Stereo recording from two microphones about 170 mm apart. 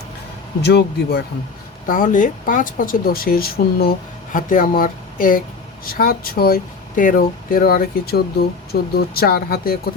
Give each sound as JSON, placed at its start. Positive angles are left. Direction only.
{"t": 0.6, "sound": "speech", "side_deg": 75}
{"t": 1.9, "sound": "speech", "side_deg": 50}